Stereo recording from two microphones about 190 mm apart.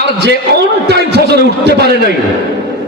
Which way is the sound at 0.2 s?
60° right (ahead or behind).